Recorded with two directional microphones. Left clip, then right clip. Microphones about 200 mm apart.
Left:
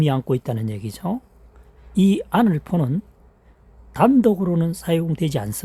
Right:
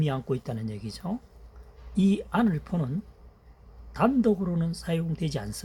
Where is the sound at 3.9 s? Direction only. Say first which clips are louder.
Left 8 dB; 65° left (ahead or behind).